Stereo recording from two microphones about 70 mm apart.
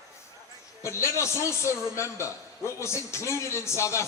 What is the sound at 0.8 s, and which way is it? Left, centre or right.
A man's voice, left.